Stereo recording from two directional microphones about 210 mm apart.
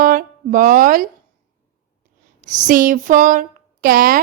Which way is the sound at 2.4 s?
40° right (ahead or behind).